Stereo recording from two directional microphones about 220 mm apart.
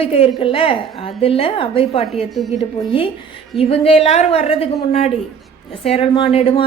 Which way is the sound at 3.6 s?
25° left (ahead or behind).